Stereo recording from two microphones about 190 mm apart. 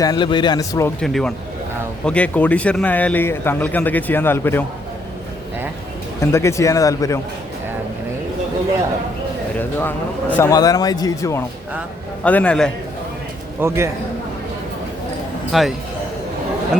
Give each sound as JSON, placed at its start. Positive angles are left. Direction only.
{"t": 0.0, "sound": "speech", "side_deg": 20}
{"t": 1.0, "sound": "a man's voice", "side_deg": 0}
{"t": 6.1, "sound": "speech", "side_deg": 15}
{"t": 9.6, "sound": "speech", "side_deg": 10}
{"t": 13.6, "sound": "a man's voice", "side_deg": -15}
{"t": 15.5, "sound": "a man's voice", "side_deg": 0}